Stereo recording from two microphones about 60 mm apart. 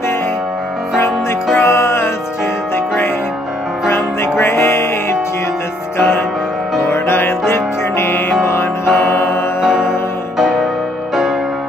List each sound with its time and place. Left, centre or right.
1.6 s music: left
3.9 s music: left
5.9 s music: left
9.0 s tick-tock: left
9.6 s music: centre